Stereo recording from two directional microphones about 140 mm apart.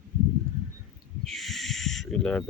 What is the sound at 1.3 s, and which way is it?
Owl, centre (ahead or behind).